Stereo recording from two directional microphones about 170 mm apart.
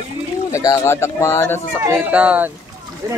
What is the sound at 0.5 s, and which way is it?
Speech, 20° left (ahead or behind).